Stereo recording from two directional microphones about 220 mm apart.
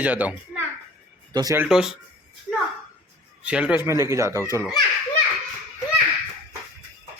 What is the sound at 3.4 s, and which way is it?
Speech, 5° right (ahead or behind).